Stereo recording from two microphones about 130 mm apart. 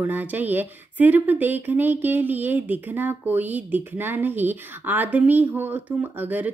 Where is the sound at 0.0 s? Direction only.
15° right (ahead or behind).